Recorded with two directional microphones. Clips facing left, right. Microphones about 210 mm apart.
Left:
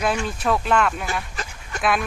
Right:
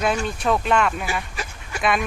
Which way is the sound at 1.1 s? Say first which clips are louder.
Even; 10° right (ahead or behind).